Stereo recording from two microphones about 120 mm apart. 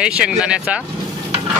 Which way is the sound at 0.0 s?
10° right (ahead or behind).